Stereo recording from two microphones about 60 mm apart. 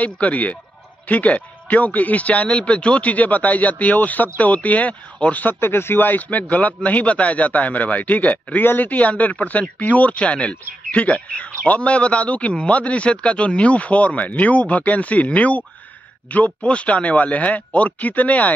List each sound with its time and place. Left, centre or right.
0.0 s speech: left